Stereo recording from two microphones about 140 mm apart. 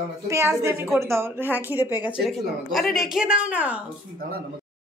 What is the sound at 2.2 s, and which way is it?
A woman's voice, centre (ahead or behind).